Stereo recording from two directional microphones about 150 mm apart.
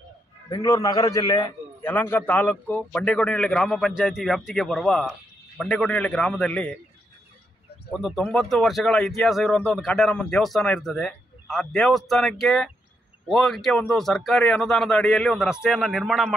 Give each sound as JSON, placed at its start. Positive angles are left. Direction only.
{"t": 0.5, "sound": "a man's voice", "side_deg": 25}
{"t": 1.8, "sound": "a man's voice", "side_deg": 15}
{"t": 7.9, "sound": "speech", "side_deg": 0}